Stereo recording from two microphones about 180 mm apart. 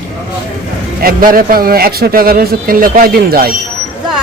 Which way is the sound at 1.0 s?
55° right (ahead or behind).